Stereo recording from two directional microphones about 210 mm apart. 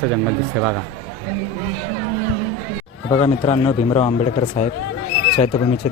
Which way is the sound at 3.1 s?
25° left (ahead or behind).